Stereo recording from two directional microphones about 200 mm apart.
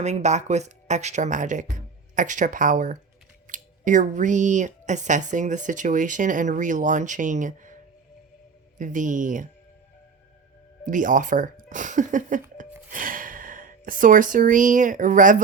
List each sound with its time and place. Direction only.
0.0 s speech: 35° right (ahead or behind)
8.8 s speech: 40° right (ahead or behind)
10.8 s speech: 40° right (ahead or behind)